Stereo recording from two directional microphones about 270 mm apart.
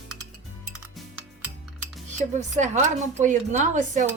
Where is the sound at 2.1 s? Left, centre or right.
Right.